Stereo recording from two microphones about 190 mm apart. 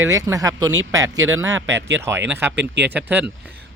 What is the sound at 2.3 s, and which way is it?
Speech, 10° right (ahead or behind).